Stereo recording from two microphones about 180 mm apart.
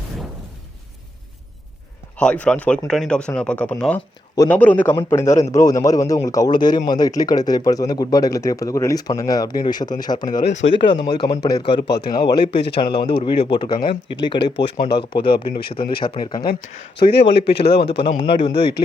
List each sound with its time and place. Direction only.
2.1 s a man's voice: 5° left (ahead or behind); by 10.4 s 25° left (ahead or behind)
10.4 s a man's voice: 40° left (ahead or behind)
10.8 s speech: 25° left (ahead or behind)
12.5 s a man's voice: 70° left (ahead or behind)
13.1 s speech: 30° left (ahead or behind)
17.1 s speech: 70° left (ahead or behind)
17.7 s a man's voice: 30° left (ahead or behind)
18.5 s speech: 65° left (ahead or behind)